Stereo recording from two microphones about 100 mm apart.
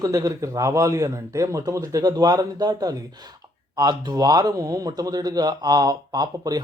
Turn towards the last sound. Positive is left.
turn(degrees=-40)  # may be behind; listen again after turning